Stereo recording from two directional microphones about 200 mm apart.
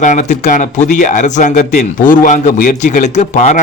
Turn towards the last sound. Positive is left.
turn(degrees=40)  # may be behind; listen again after turning